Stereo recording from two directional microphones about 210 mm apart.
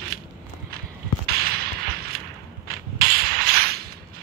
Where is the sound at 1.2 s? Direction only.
45° right (ahead or behind).